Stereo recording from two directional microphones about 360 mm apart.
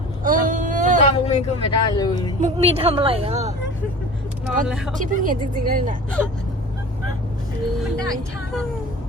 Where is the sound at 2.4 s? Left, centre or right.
Centre.